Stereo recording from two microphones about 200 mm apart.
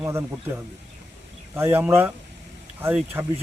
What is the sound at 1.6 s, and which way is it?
Speech, 10° right (ahead or behind).